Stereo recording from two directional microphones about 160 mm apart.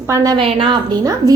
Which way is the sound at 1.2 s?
20° left (ahead or behind).